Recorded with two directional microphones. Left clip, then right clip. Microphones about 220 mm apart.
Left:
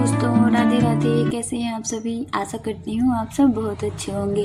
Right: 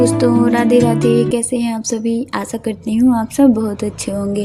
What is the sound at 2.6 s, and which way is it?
A woman's voice, 25° right (ahead or behind).